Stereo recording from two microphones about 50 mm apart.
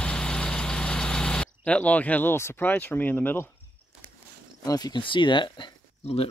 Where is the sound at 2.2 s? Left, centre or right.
Left.